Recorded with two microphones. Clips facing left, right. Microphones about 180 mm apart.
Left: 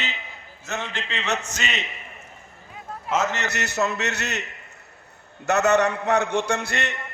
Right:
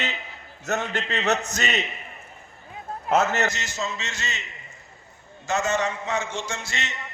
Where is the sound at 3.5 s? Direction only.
65° left (ahead or behind).